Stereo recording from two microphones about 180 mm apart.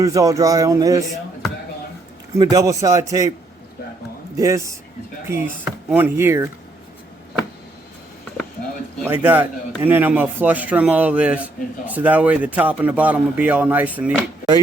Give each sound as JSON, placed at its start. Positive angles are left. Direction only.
{"t": 0.0, "sound": "a man's voice", "side_deg": -20}
{"t": 2.4, "sound": "a man's voice", "side_deg": -20}
{"t": 4.4, "sound": "a man's voice", "side_deg": -15}
{"t": 9.0, "sound": "a man's voice", "side_deg": -10}